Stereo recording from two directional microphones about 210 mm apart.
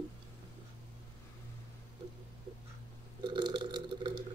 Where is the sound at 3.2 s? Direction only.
20° right (ahead or behind).